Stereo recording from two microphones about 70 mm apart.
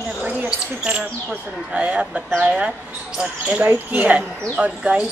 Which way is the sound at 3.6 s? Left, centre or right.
Right.